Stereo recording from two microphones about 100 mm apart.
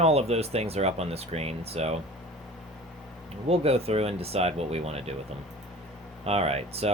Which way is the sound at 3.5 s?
90° right.